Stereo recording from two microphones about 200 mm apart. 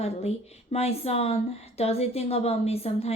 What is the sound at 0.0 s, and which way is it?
A woman's voice, 30° left (ahead or behind).